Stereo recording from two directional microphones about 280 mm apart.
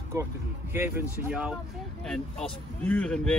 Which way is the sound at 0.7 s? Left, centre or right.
Centre.